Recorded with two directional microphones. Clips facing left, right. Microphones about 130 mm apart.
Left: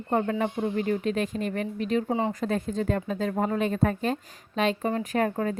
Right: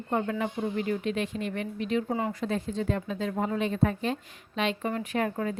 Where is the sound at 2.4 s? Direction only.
50° left (ahead or behind).